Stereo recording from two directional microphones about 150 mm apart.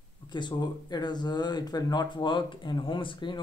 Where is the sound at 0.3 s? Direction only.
30° left (ahead or behind).